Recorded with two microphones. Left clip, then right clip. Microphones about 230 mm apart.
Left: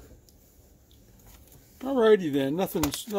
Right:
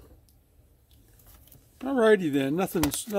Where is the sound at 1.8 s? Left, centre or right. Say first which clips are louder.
Even; right.